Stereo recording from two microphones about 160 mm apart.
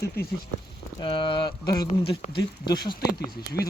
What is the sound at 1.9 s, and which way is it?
Speech, 35° left (ahead or behind).